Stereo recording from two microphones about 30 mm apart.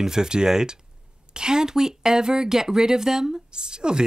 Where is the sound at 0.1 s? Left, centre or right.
Right.